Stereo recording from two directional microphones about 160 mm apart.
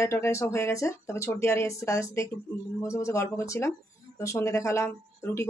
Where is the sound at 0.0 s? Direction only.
20° left (ahead or behind).